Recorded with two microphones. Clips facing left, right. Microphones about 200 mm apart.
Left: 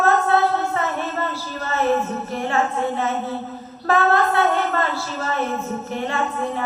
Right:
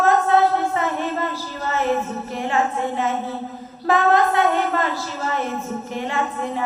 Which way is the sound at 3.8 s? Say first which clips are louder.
Right 1 dB; 15° right (ahead or behind).